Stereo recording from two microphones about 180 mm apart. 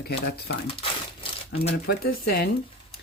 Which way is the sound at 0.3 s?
65° left (ahead or behind).